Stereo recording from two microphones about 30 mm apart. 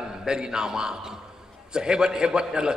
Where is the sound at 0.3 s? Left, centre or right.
Right.